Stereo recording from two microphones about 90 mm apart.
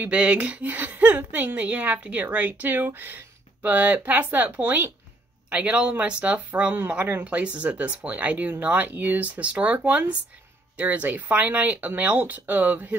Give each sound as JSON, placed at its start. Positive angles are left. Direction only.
{"t": 0.0, "sound": "a woman's voice", "side_deg": -15}